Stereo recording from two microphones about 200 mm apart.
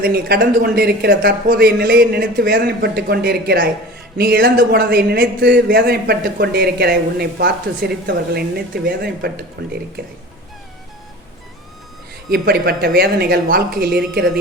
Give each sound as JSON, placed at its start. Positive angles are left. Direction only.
{"t": 0.0, "sound": "speech", "side_deg": -50}
{"t": 12.3, "sound": "speech", "side_deg": -50}